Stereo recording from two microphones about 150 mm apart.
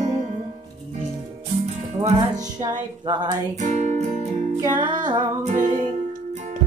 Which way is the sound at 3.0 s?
30° right (ahead or behind).